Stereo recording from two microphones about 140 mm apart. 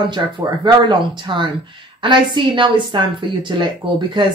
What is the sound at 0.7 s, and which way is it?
Speech, 35° right (ahead or behind).